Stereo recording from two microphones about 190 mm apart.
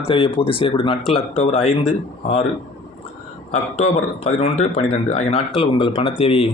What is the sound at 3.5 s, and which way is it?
A man's voice, 35° left (ahead or behind).